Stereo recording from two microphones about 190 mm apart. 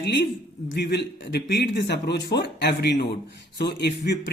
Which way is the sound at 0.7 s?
60° left (ahead or behind).